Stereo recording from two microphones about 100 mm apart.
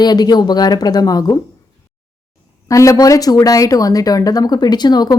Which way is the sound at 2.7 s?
35° left (ahead or behind).